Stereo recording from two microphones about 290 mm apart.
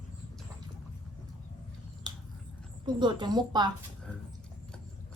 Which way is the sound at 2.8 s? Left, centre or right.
Centre.